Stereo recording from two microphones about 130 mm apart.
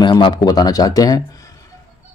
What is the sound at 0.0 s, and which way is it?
Speech, 35° left (ahead or behind).